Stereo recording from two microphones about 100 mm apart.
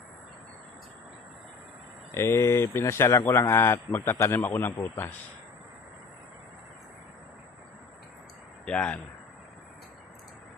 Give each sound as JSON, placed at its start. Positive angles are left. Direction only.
{"t": 2.1, "sound": "speech", "side_deg": 25}
{"t": 8.6, "sound": "speech", "side_deg": 10}